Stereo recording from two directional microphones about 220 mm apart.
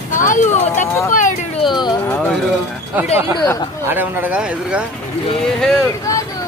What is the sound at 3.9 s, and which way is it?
Speech, 10° right (ahead or behind).